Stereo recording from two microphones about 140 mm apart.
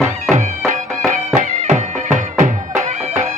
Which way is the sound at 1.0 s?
60° right (ahead or behind).